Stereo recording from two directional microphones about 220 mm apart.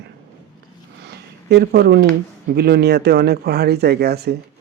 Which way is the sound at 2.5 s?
45° right (ahead or behind).